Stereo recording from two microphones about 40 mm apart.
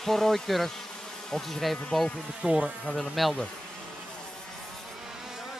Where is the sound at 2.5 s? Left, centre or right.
Right.